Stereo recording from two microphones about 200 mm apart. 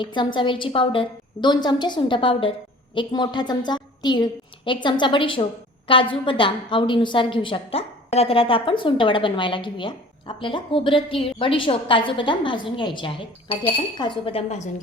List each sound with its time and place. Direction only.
0.0 s a woman's voice: 25° left (ahead or behind)